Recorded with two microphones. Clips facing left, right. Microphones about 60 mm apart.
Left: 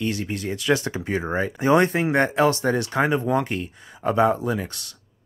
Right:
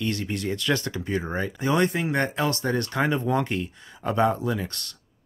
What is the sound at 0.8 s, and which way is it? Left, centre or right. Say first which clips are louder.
Speech: left 2 dB; left.